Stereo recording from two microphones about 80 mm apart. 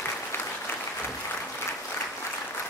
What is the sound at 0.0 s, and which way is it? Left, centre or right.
Applause, left.